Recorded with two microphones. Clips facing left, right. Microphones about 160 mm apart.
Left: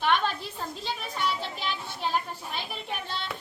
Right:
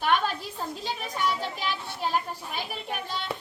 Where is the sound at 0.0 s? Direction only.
10° right (ahead or behind).